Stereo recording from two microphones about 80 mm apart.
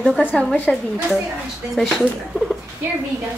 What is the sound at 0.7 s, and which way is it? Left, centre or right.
Speech, centre.